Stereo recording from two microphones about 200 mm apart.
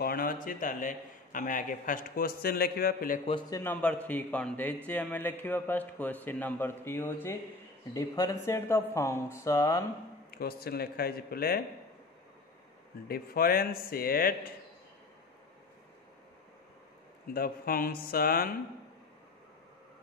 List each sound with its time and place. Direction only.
0.0 s a man's voice: 45° left (ahead or behind)
3.3 s a man's voice: 20° left (ahead or behind)
10.3 s a man's voice: 50° left (ahead or behind)
13.1 s a man's voice: 50° left (ahead or behind)
17.3 s a man's voice: 45° left (ahead or behind)